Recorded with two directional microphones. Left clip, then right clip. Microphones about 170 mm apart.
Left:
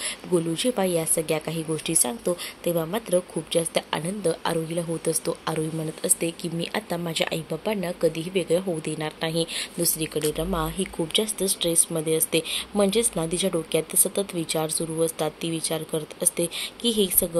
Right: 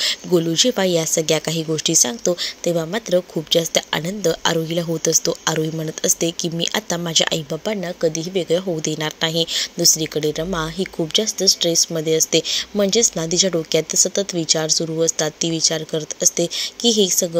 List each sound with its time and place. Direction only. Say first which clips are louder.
0.0 s speech: right 8 dB; 35° right (ahead or behind)